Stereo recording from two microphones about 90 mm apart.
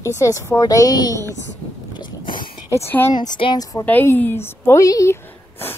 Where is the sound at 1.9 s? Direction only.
60° left (ahead or behind).